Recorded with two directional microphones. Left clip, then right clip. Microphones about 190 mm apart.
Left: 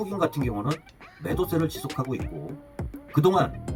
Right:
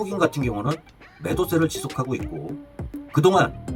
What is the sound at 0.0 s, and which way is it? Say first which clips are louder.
Speech: right 4 dB; 10° right (ahead or behind).